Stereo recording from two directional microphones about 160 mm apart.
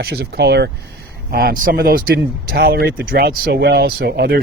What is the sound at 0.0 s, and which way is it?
Speech, 80° right.